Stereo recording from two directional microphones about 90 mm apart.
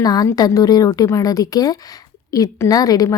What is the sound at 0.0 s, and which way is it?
A woman's voice, 45° left (ahead or behind).